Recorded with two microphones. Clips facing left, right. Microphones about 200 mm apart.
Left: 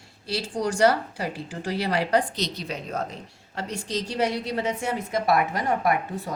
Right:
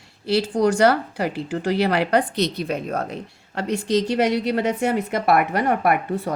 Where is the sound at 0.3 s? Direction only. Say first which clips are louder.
Right 8 dB; 65° right (ahead or behind).